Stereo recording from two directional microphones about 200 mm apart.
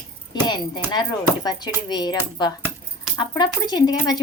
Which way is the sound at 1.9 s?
20° left (ahead or behind).